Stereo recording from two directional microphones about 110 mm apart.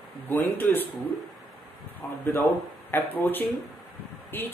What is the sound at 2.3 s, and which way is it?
Speech, 15° left (ahead or behind).